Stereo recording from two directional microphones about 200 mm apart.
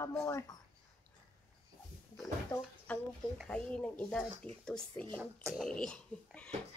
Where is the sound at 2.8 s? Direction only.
5° left (ahead or behind).